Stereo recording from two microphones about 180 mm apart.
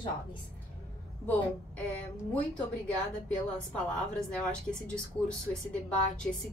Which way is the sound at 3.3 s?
5° left (ahead or behind).